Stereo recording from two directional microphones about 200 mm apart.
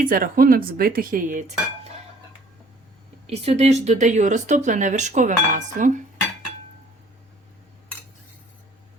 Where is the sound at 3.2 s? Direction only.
30° right (ahead or behind).